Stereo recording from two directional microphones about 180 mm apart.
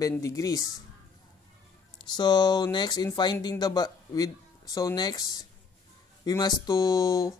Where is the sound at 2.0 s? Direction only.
25° left (ahead or behind).